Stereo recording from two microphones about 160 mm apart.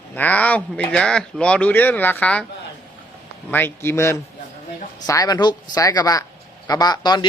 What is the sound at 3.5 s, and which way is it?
Speech, 15° left (ahead or behind).